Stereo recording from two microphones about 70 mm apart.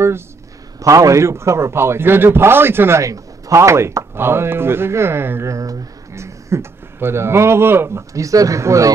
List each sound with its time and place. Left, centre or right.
0.7 s speech: right
3.0 s speech: right
5.5 s speech: right
8.1 s speech: right